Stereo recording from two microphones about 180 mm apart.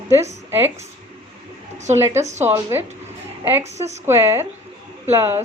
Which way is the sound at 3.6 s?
40° right (ahead or behind).